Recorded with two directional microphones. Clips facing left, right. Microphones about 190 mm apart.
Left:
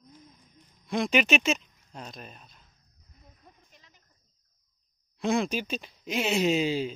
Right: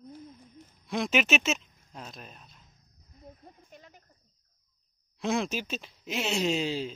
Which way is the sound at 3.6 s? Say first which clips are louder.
Right 10 dB; 50° right (ahead or behind).